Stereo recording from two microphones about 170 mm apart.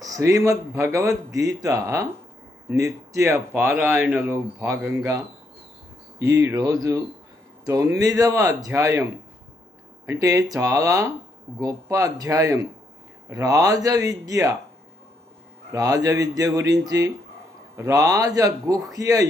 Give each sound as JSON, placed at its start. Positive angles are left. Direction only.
{"t": 0.0, "sound": "speech", "side_deg": -20}
{"t": 10.1, "sound": "speech", "side_deg": -20}
{"t": 15.7, "sound": "speech", "side_deg": -20}